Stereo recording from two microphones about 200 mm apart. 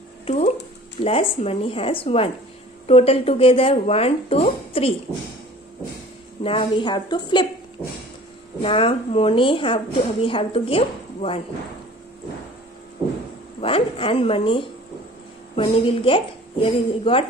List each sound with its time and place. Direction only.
1.0 s a woman's voice: 30° left (ahead or behind)
6.4 s a woman's voice: 25° left (ahead or behind)
8.6 s a woman's voice: 30° left (ahead or behind)
13.6 s a woman's voice: 25° left (ahead or behind)